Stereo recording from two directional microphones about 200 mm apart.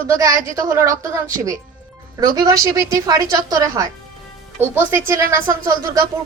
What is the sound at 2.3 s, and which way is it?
A woman's voice, 20° right (ahead or behind).